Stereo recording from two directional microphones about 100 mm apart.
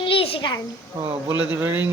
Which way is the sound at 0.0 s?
65° left (ahead or behind).